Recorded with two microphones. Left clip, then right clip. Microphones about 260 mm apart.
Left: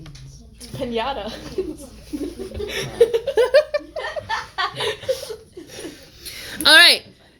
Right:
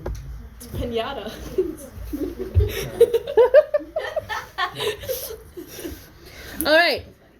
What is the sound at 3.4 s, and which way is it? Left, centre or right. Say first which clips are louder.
Speech: right 2 dB; left.